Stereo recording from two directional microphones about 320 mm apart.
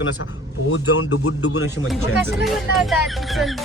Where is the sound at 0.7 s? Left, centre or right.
Left.